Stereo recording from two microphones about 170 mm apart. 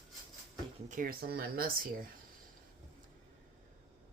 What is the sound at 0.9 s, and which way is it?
Speech, 55° right (ahead or behind).